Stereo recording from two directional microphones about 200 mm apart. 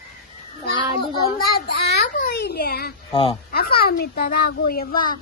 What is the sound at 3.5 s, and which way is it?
A child's voice, 50° left (ahead or behind).